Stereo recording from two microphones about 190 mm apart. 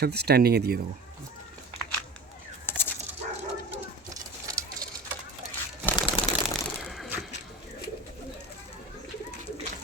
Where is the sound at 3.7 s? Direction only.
20° right (ahead or behind).